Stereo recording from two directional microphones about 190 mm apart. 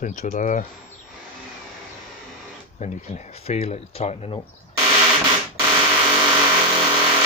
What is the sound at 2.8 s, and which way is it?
Speech, 35° left (ahead or behind).